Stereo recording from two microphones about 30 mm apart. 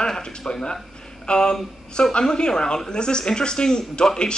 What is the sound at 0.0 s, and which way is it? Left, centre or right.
Speech, left.